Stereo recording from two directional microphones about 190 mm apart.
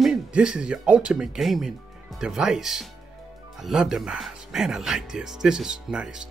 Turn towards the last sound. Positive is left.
turn(degrees=-5)  # may be behind; listen again after turning